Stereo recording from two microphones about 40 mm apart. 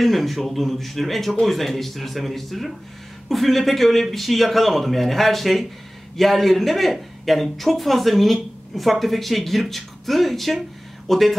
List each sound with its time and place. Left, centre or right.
0.0 s a woman's voice: centre